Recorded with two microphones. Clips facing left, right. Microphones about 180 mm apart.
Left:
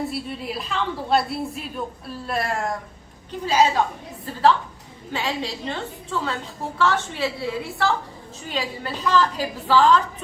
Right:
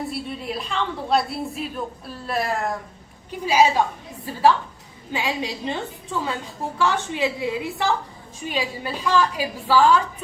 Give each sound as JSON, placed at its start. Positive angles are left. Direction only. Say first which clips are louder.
{"t": 0.1, "sound": "a woman's voice", "louder": "even", "side_deg": 0}